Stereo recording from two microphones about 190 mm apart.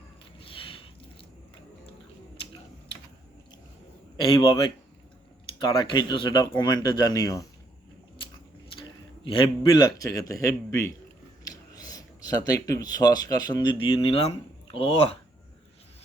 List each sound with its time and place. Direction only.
0.3 s a sound: 30° left (ahead or behind)
4.2 s speech: 25° left (ahead or behind)
5.5 s speech: 25° left (ahead or behind)
8.7 s a man's voice: 25° left (ahead or behind)